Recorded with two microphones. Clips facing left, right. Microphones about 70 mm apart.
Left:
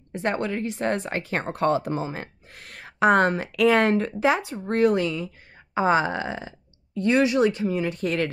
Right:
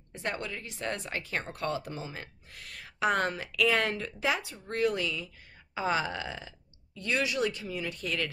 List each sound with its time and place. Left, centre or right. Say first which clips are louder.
0.1 s speech: left 10 dB; left